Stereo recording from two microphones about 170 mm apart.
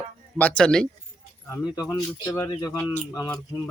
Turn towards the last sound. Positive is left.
turn(degrees=15)  # may be behind; listen again after turning